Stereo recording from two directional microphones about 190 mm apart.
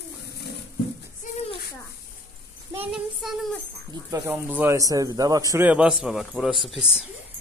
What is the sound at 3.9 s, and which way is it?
A man's voice, 20° right (ahead or behind).